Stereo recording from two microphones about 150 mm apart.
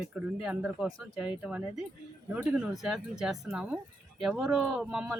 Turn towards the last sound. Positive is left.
turn(degrees=-5)  # may be behind; listen again after turning